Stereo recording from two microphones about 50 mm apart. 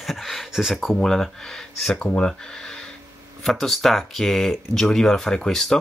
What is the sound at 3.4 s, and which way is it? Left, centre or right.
Speech, centre.